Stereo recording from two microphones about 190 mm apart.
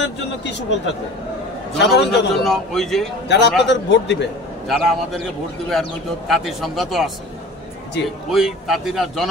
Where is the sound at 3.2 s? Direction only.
65° left (ahead or behind).